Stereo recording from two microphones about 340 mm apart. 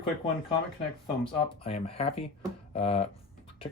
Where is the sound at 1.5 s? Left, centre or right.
Centre.